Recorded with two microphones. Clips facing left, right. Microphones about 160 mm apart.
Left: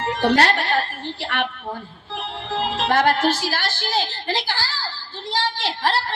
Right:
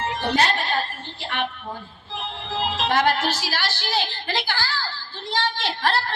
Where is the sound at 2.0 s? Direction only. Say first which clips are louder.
Left 3 dB; 55° left (ahead or behind).